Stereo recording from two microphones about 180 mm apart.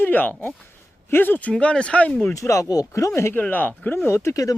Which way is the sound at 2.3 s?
15° left (ahead or behind).